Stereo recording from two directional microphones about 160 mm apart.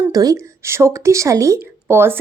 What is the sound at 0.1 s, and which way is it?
A woman's voice, 20° right (ahead or behind).